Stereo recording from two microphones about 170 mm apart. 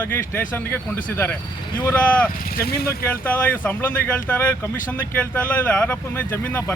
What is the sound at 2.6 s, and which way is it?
Speech, 65° left (ahead or behind).